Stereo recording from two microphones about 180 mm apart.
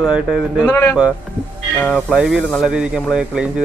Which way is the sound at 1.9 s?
5° right (ahead or behind).